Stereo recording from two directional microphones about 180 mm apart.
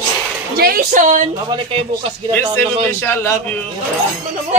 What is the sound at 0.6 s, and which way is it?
Speech, 55° right (ahead or behind).